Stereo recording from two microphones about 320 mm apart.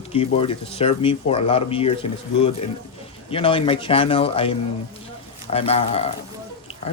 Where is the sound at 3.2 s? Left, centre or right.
Centre.